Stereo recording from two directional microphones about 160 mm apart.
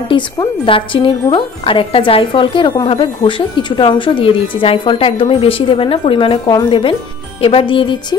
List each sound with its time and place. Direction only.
0.1 s a woman's voice: 30° left (ahead or behind)